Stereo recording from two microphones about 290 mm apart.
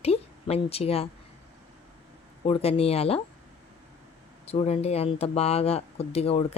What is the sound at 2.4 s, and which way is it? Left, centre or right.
Speech, centre.